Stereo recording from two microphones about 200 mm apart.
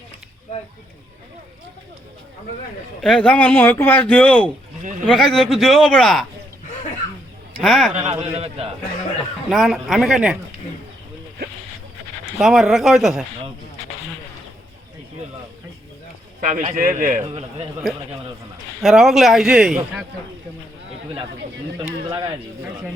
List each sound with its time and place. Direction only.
3.0 s speech: 5° left (ahead or behind)
4.8 s speech: 40° right (ahead or behind)
5.0 s a man's voice: centre (ahead or behind)
7.6 s a man's voice: centre (ahead or behind)
7.9 s a man's voice: 35° right (ahead or behind)
9.5 s a man's voice: centre (ahead or behind)
12.2 s a man's voice: centre (ahead or behind)
16.5 s a man's voice: 40° right (ahead or behind)
17.2 s a man's voice: 30° right (ahead or behind)
18.8 s a man's voice: centre (ahead or behind)